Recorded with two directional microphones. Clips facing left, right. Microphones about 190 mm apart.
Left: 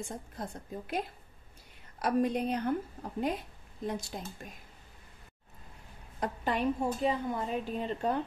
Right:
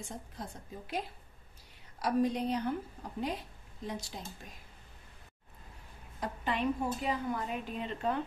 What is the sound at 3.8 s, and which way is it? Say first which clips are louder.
Speech: left 4 dB; 50° left (ahead or behind).